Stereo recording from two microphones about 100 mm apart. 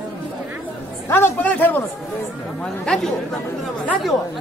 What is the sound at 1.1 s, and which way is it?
Speech, 20° left (ahead or behind).